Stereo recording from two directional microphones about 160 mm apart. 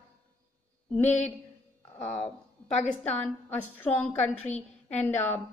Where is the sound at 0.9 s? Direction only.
10° left (ahead or behind).